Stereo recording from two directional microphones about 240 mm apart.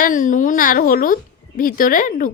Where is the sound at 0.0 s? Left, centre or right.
Left.